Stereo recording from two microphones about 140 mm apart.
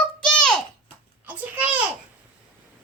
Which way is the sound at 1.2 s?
10° right (ahead or behind).